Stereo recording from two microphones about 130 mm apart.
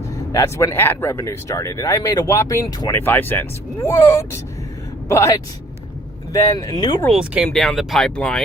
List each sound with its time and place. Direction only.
0.3 s speech: 25° left (ahead or behind)
6.7 s speech: 35° left (ahead or behind)
7.1 s speech: centre (ahead or behind)